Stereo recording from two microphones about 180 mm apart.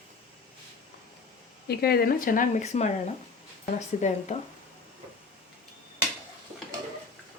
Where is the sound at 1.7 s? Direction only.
60° left (ahead or behind); by 2.9 s 40° left (ahead or behind).